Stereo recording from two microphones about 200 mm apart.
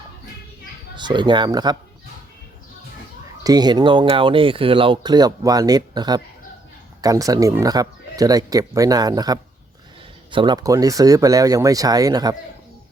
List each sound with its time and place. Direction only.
0.9 s speech: 20° right (ahead or behind)
3.4 s speech: 20° right (ahead or behind)